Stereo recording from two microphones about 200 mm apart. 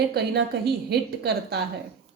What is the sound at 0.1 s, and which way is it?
A woman's voice, 55° right (ahead or behind).